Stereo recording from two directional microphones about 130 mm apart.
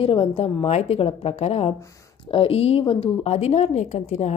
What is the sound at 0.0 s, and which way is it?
A woman's voice, 45° left (ahead or behind).